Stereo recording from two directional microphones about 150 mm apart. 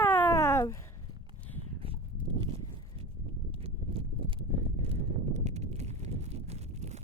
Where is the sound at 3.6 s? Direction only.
40° right (ahead or behind).